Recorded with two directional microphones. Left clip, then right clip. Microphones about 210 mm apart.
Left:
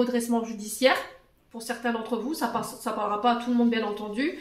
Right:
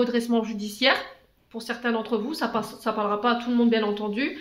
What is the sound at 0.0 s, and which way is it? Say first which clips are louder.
A woman's voice: right 2 dB; 40° right (ahead or behind).